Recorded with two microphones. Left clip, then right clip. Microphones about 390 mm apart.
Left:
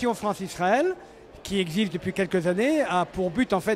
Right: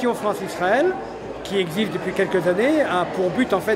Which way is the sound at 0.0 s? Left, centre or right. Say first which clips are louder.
Right 5 dB; left.